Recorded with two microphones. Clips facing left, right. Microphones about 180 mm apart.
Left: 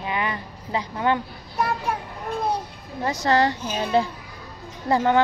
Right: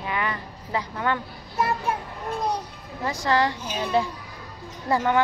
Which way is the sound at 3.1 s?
30° left (ahead or behind).